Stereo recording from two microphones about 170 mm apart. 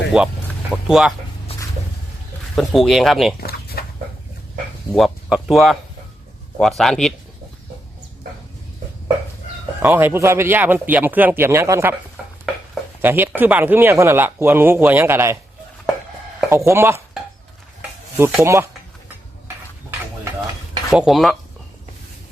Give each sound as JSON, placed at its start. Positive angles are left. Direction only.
{"t": 0.1, "sound": "speech", "side_deg": -5}
{"t": 1.5, "sound": "a sound", "side_deg": 35}
{"t": 2.6, "sound": "speech", "side_deg": 0}
{"t": 3.8, "sound": "a sound", "side_deg": 65}
{"t": 4.9, "sound": "speech", "side_deg": 0}
{"t": 9.8, "sound": "speech", "side_deg": -15}
{"t": 13.0, "sound": "speech", "side_deg": -10}
{"t": 16.5, "sound": "speech", "side_deg": -15}
{"t": 18.2, "sound": "speech", "side_deg": -10}
{"t": 20.9, "sound": "speech", "side_deg": 0}